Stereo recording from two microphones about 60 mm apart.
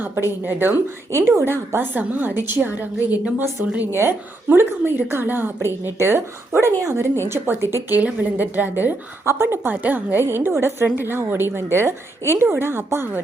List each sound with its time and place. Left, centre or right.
0.0 s a woman's voice: right
1.1 s a woman's voice: right
3.9 s a woman's voice: right
5.8 s a woman's voice: right
7.3 s a woman's voice: right
7.9 s a woman's voice: right
9.2 s a woman's voice: right
9.7 s a woman's voice: right